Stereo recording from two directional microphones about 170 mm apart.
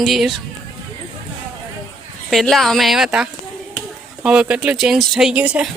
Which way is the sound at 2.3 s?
Centre (ahead or behind).